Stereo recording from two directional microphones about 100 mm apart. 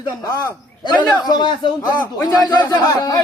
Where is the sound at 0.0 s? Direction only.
35° left (ahead or behind).